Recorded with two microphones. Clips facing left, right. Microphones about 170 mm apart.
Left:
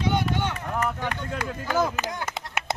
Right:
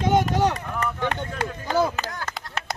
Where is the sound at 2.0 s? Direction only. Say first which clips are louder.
Left 2 dB; 20° left (ahead or behind).